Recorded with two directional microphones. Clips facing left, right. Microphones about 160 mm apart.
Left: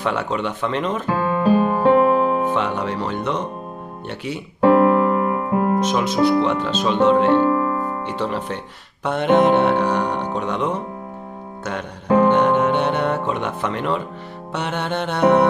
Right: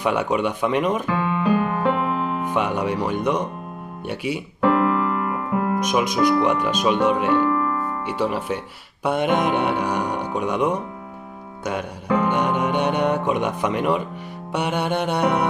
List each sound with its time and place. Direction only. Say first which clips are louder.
0.0 s music: right 2 dB; 15° right (ahead or behind)
1.0 s piano: left 3 dB; 35° left (ahead or behind)
2.5 s music: even; 10° right (ahead or behind)
4.6 s keyboard: left 6 dB; 35° left (ahead or behind)
5.8 s speech: left 1 dB; 15° right (ahead or behind)
6.4 s music: even; 15° right (ahead or behind)
7.4 s music: left 3 dB; 30° left (ahead or behind)
8.0 s music: even; 10° right (ahead or behind)
12.3 s speech: left 5 dB; 10° right (ahead or behind)
14.5 s music: right 2 dB; 10° right (ahead or behind)